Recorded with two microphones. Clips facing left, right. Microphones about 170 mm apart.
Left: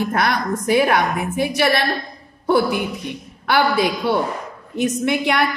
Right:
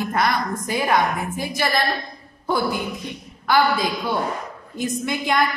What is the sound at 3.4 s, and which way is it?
A woman's voice, 75° left (ahead or behind).